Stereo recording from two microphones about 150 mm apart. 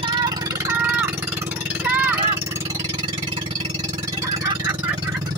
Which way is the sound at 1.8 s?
10° right (ahead or behind).